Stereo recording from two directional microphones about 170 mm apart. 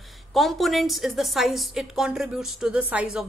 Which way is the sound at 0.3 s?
Centre (ahead or behind).